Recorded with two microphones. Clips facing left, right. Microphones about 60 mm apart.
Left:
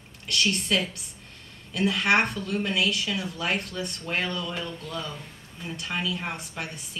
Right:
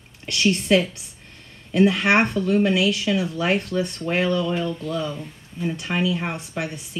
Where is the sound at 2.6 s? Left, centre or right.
Centre.